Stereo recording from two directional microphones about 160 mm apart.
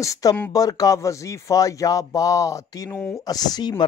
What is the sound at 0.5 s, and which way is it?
Speech, 20° left (ahead or behind).